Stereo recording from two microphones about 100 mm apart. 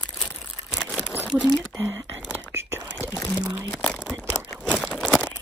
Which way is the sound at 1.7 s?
30° right (ahead or behind).